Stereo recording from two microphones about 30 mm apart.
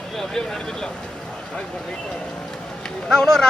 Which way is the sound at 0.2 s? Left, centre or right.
Centre.